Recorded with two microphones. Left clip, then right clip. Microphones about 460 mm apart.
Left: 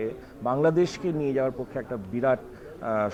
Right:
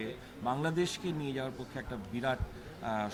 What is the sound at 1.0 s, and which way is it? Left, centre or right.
Speech, centre.